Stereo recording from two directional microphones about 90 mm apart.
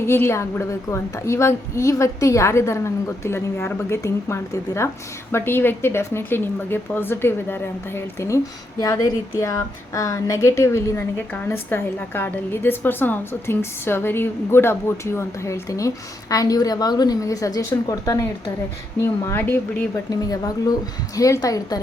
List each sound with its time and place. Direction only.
0.0 s a woman's voice: 25° left (ahead or behind)
8.8 s a woman's voice: 40° left (ahead or behind)
18.9 s a woman's voice: 30° left (ahead or behind)
20.1 s a woman's voice: 45° left (ahead or behind)